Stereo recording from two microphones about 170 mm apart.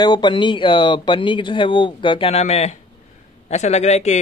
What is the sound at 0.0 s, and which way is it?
Speech, 25° left (ahead or behind).